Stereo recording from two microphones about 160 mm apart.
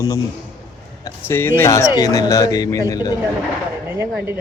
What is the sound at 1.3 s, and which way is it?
Speech, 15° left (ahead or behind).